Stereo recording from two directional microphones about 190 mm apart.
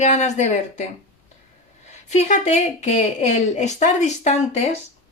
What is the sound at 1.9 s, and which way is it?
Speech, 35° left (ahead or behind).